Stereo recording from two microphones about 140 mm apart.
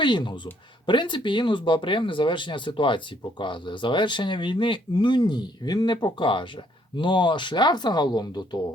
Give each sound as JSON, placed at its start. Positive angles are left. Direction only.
{"t": 0.0, "sound": "speech", "side_deg": 35}